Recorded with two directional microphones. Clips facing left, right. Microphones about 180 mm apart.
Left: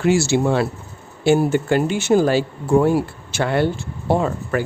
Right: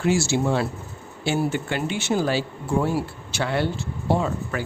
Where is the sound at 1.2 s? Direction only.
45° left (ahead or behind).